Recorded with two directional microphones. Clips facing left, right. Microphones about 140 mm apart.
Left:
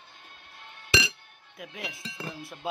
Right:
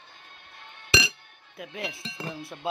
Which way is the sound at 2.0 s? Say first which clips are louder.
Right 2 dB; 25° right (ahead or behind).